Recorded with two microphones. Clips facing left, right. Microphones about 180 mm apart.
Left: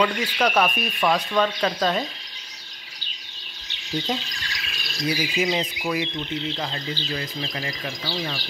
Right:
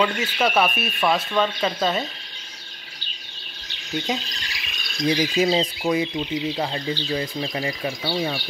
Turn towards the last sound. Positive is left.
turn(degrees=-15)  # may be behind; listen again after turning